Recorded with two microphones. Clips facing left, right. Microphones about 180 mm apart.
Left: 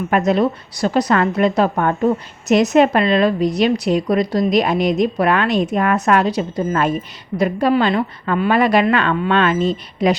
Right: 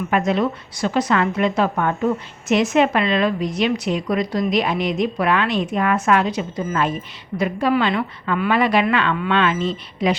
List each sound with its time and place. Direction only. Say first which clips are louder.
0.1 s a woman's voice: left 4 dB; 40° left (ahead or behind)